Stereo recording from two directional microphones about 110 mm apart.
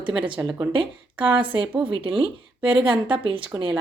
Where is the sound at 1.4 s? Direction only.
50° right (ahead or behind).